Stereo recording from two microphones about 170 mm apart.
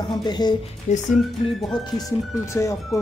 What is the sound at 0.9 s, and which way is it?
Speech, 45° left (ahead or behind).